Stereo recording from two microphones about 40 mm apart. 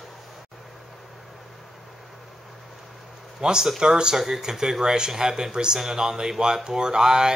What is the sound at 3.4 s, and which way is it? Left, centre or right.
Speech, centre.